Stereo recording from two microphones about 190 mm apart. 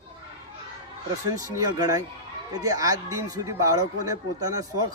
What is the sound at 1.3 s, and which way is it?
A man's voice, 20° right (ahead or behind).